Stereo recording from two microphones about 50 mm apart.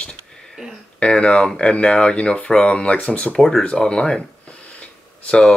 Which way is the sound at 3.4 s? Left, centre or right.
Centre.